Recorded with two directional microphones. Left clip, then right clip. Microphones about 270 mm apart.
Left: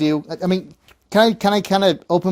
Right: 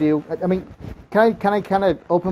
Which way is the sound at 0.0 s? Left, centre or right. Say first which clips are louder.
Even; left.